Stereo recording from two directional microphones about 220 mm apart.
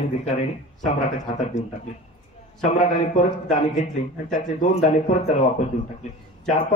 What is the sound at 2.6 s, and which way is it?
A man's voice, 30° left (ahead or behind).